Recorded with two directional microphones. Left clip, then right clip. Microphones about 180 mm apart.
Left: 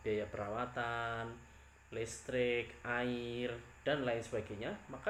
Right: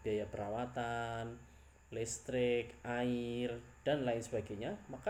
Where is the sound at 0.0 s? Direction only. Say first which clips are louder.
Even; 25° right (ahead or behind).